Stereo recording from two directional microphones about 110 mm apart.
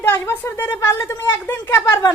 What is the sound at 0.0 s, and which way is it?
A woman's voice, 20° left (ahead or behind).